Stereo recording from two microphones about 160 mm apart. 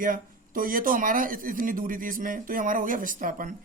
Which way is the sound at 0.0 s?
60° right (ahead or behind).